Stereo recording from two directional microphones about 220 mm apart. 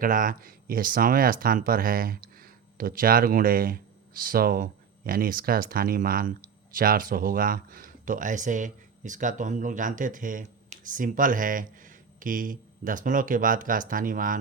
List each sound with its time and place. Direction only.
0.0 s speech: 40° right (ahead or behind)